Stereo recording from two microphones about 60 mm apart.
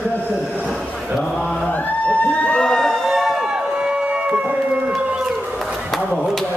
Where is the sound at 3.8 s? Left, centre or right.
Centre.